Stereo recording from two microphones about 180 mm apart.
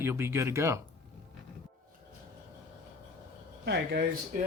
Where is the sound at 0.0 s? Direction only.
15° right (ahead or behind).